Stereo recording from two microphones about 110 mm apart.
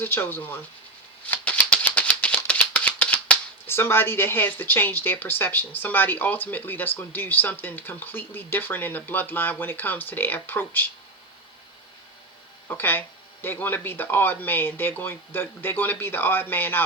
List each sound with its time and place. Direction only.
0.0 s speech: 20° left (ahead or behind)
1.3 s rattle: 15° left (ahead or behind)
12.6 s speech: 20° left (ahead or behind)